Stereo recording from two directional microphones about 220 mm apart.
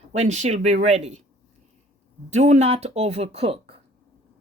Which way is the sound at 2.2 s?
30° right (ahead or behind).